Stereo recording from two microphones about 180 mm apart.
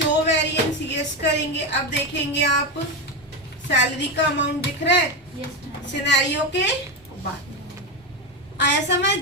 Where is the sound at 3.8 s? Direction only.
80° left.